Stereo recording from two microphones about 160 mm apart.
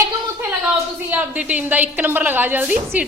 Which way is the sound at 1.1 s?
10° right (ahead or behind).